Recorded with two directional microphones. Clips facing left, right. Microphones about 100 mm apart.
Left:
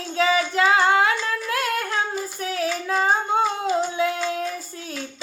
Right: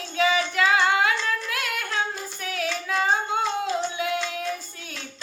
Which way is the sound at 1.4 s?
30° left (ahead or behind).